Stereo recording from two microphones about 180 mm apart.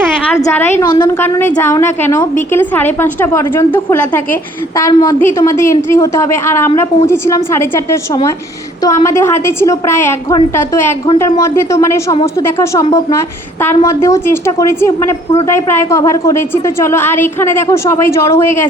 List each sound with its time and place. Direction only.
0.3 s a woman's voice: 10° left (ahead or behind)
0.9 s a woman's voice: 25° left (ahead or behind)
1.2 s a woman's voice: 10° left (ahead or behind)